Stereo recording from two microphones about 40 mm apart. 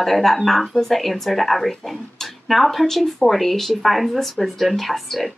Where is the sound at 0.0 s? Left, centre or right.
Centre.